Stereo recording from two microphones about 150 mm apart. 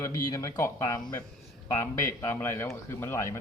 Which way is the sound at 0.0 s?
20° left (ahead or behind).